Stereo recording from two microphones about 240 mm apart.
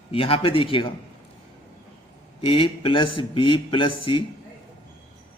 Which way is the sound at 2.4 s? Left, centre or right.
Left.